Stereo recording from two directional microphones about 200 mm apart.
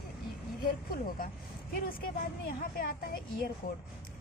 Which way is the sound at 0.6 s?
45° left (ahead or behind).